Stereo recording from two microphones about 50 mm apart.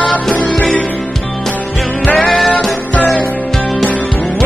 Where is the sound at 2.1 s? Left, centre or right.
Left.